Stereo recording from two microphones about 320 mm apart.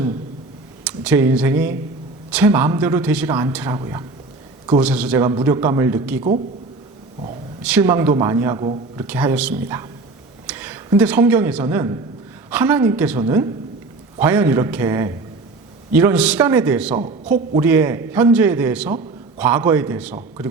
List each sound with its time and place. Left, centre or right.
0.9 s a woman's voice: centre
7.6 s a woman's voice: centre